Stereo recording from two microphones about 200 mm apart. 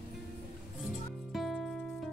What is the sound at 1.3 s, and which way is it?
Music, centre (ahead or behind).